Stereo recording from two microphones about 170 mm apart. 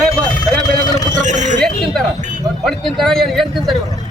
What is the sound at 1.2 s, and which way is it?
Speech, 45° right (ahead or behind).